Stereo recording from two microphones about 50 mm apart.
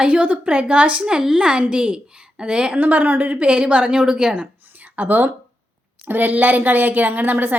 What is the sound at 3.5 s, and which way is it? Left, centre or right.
Speech, right.